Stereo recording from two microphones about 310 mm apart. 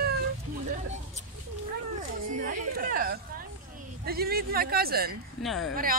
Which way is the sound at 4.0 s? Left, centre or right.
Right.